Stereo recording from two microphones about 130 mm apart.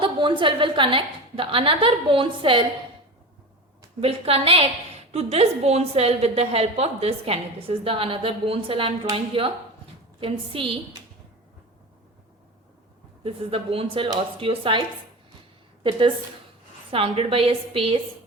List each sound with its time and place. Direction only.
0.0 s a woman's voice: 40° right (ahead or behind)
4.0 s a woman's voice: 50° right (ahead or behind)
13.2 s a woman's voice: 45° right (ahead or behind)